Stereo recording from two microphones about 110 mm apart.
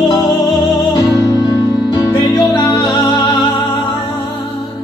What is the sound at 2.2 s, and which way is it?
Music, 40° left (ahead or behind).